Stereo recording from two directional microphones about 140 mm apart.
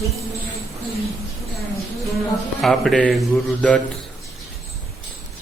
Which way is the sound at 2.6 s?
Centre (ahead or behind).